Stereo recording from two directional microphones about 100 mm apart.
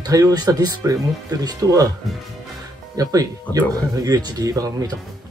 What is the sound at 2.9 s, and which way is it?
Speech, 35° right (ahead or behind).